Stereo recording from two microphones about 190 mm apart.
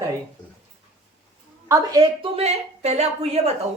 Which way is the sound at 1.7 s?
20° right (ahead or behind).